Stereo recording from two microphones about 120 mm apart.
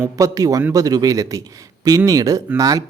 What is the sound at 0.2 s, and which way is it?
Speech, 30° right (ahead or behind).